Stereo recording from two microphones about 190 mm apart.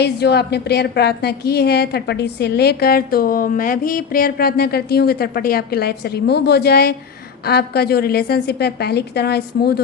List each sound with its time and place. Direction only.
0.0 s a woman's voice: 60° left (ahead or behind)